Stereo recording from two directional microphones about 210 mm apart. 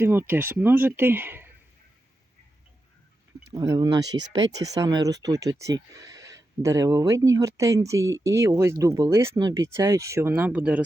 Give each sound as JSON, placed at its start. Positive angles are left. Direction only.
{"t": 0.0, "sound": "speech", "side_deg": -10}
{"t": 3.5, "sound": "speech", "side_deg": -20}